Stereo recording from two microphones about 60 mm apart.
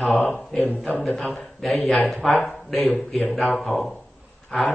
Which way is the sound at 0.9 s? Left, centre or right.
Left.